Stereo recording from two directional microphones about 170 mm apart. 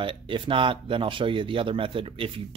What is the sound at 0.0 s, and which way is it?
Speech, 30° right (ahead or behind).